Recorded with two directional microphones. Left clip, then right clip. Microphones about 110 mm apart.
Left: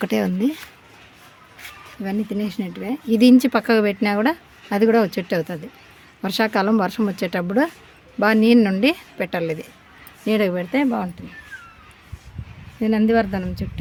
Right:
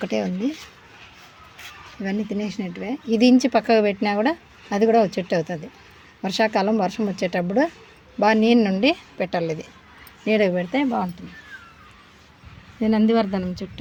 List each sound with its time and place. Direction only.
0.0 s speech: 40° left (ahead or behind)
2.3 s speech: 25° left (ahead or behind)
12.8 s speech: 5° left (ahead or behind)